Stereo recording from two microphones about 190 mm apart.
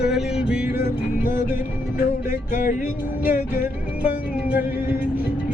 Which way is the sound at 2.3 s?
40° left (ahead or behind).